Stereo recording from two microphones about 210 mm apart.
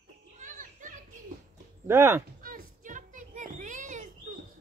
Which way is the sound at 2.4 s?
40° right (ahead or behind).